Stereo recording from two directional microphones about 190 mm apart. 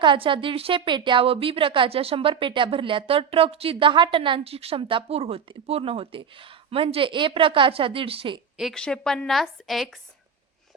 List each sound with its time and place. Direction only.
0.0 s a woman's voice: 25° right (ahead or behind)
8.5 s a woman's voice: centre (ahead or behind)